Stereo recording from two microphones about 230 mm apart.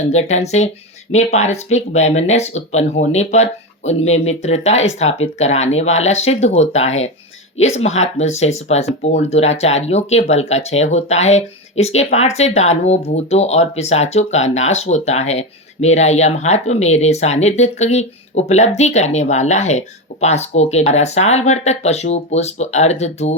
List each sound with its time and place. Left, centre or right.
0.1 s speech: left